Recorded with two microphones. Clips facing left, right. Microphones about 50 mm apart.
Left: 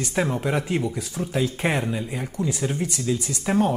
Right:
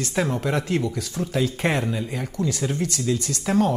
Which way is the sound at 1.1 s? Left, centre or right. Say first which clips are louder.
Right 1 dB; centre.